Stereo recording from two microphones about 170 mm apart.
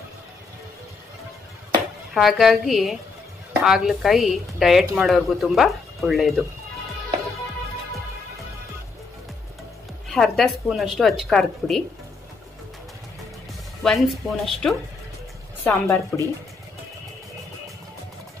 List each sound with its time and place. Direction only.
2.1 s speech: centre (ahead or behind)
10.0 s speech: centre (ahead or behind)
13.8 s speech: centre (ahead or behind)
15.6 s speech: 15° left (ahead or behind)